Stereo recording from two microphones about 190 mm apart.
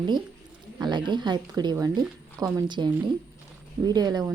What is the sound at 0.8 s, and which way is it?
Speech, 25° right (ahead or behind).